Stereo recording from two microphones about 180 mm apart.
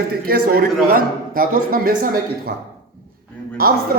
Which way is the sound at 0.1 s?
60° right (ahead or behind).